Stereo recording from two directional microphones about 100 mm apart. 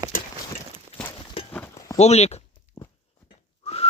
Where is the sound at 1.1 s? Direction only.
70° left (ahead or behind).